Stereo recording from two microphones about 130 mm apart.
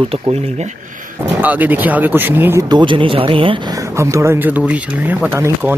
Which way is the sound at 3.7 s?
20° right (ahead or behind).